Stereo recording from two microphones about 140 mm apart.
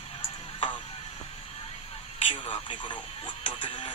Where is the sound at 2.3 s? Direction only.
50° left (ahead or behind).